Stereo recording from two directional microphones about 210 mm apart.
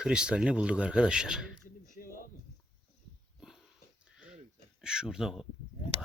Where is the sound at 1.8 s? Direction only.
40° left (ahead or behind).